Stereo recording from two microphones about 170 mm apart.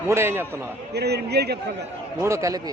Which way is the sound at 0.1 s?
15° right (ahead or behind).